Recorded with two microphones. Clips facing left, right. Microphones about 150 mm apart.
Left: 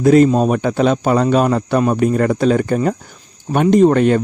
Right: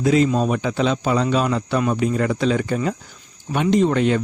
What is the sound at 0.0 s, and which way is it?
Speech, 50° left (ahead or behind).